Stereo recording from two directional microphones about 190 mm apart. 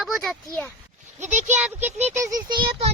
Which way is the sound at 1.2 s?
40° right (ahead or behind).